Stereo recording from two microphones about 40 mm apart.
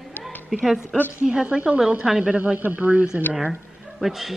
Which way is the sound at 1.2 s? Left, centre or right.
Right.